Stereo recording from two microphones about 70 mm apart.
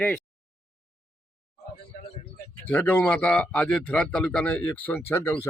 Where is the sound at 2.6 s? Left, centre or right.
Left.